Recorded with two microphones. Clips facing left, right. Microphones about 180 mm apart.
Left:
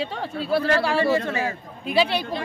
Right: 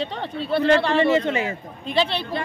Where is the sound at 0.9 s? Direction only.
20° right (ahead or behind).